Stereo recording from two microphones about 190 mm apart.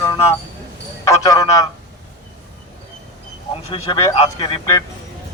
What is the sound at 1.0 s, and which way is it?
Speech, 15° left (ahead or behind).